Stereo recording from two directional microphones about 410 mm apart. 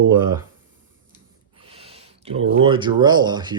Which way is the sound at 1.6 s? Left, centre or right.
Centre.